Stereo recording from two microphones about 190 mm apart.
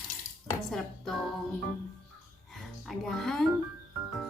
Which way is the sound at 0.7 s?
Centre (ahead or behind).